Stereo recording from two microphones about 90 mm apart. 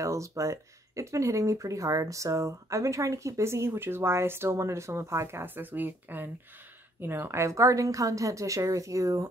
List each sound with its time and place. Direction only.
0.0 s speech: 35° right (ahead or behind)